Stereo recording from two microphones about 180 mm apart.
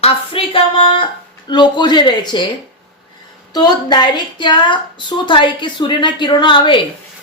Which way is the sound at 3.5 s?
25° left (ahead or behind).